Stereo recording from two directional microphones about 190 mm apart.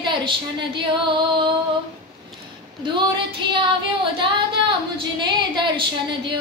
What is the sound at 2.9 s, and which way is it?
Female singing, 25° right (ahead or behind).